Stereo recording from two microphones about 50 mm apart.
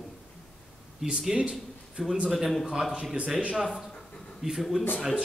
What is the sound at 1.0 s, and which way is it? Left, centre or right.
Speech, centre.